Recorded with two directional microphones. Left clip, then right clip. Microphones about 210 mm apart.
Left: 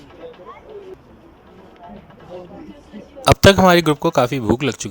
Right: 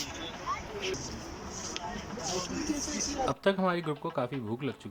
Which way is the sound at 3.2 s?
45° left (ahead or behind).